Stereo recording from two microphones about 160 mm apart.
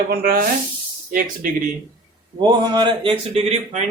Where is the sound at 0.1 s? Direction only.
75° right (ahead or behind).